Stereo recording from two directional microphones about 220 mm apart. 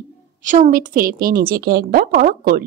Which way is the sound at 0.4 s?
35° right (ahead or behind).